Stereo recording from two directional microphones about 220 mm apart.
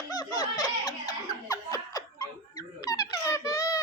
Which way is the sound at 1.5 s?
15° left (ahead or behind).